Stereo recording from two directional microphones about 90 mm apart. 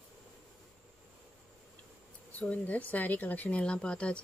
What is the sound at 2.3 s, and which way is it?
A woman's voice, 15° left (ahead or behind).